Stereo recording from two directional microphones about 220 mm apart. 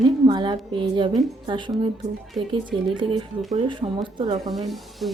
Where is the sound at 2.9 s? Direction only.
20° right (ahead or behind).